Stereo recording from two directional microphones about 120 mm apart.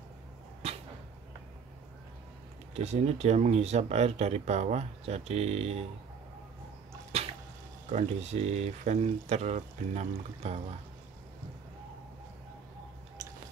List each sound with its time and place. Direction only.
0.6 s a sound: 60° right (ahead or behind)
2.7 s speech: 65° right (ahead or behind)
7.1 s drip: 55° right (ahead or behind)
7.9 s speech: 70° right (ahead or behind)